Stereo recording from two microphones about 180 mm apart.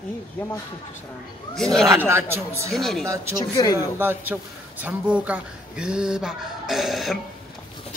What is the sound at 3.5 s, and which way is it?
Speech, 20° left (ahead or behind).